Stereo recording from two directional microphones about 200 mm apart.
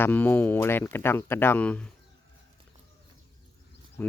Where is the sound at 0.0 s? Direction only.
10° left (ahead or behind).